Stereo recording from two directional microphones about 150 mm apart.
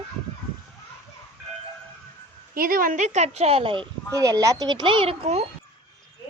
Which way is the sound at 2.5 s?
75° right (ahead or behind).